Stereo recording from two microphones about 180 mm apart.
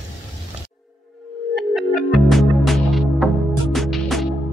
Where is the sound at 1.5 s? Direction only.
Centre (ahead or behind).